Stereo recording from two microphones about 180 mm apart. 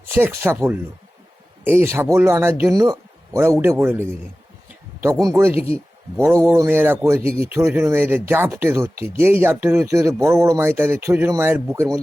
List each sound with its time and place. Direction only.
0.1 s speech: 15° right (ahead or behind)
5.2 s speech: 15° right (ahead or behind)